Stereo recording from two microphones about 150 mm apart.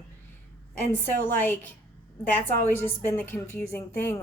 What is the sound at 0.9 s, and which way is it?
A woman's voice, 15° left (ahead or behind).